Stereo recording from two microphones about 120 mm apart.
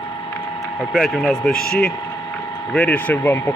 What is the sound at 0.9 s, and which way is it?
Speech, centre (ahead or behind).